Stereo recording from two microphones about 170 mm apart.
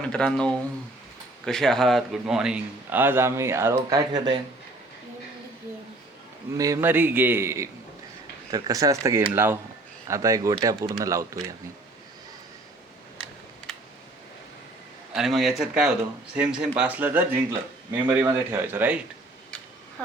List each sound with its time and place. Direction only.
0.0 s a man's voice: 5° left (ahead or behind); by 4.2 s 20° right (ahead or behind)
6.6 s a man's voice: 15° right (ahead or behind)
15.1 s a man's voice: centre (ahead or behind)